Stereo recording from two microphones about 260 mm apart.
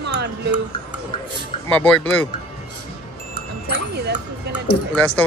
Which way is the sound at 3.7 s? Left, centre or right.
Right.